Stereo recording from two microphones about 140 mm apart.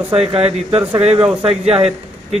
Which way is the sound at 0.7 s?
45° right (ahead or behind).